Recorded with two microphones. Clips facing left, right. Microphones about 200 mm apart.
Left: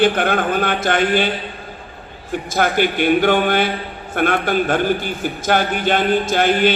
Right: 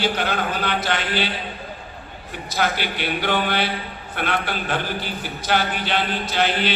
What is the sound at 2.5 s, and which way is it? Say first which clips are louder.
A man's voice: left 6 dB; 50° left (ahead or behind).